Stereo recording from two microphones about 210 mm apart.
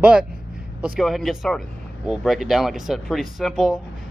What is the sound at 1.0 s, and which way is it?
Speech, centre (ahead or behind).